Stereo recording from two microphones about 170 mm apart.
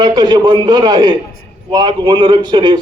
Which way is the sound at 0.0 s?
25° right (ahead or behind).